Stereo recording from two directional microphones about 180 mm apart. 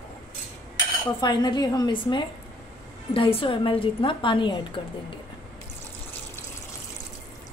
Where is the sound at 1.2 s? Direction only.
25° left (ahead or behind).